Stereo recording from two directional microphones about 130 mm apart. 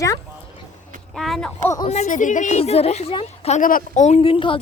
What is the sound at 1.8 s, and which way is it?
Speech, 65° left (ahead or behind).